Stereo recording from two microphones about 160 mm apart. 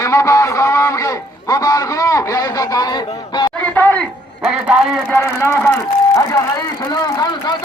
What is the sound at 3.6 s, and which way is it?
Speech, 10° left (ahead or behind).